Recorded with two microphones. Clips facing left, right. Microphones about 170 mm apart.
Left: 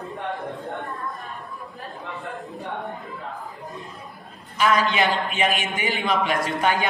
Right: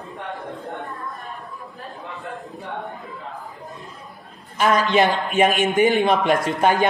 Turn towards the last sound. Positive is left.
turn(degrees=-50)  # may be behind; listen again after turning